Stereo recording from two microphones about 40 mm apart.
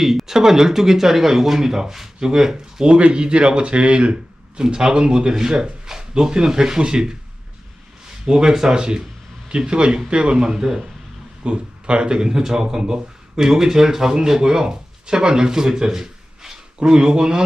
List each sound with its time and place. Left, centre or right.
0.0 s speech: centre
8.3 s speech: centre